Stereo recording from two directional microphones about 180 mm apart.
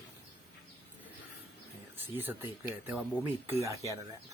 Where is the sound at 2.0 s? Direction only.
10° right (ahead or behind).